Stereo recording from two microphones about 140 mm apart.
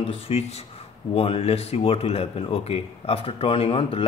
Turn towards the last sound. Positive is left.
turn(degrees=40)  # may be behind; listen again after turning